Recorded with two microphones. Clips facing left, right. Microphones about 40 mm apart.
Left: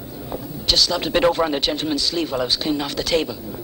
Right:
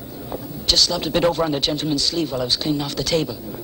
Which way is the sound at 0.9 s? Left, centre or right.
Centre.